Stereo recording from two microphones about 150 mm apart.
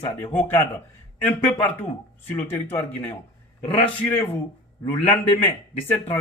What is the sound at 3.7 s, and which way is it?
Speech, 10° left (ahead or behind).